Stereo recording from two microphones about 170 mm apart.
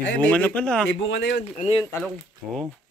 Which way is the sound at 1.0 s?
90° left.